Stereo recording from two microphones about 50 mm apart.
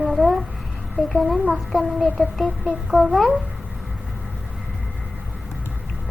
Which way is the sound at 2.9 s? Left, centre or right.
Centre.